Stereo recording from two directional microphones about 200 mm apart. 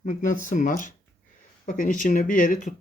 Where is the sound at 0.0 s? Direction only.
40° left (ahead or behind).